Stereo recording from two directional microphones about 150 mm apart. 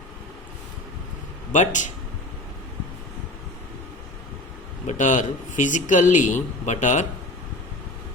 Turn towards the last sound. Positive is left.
turn(degrees=55)  # may be behind; listen again after turning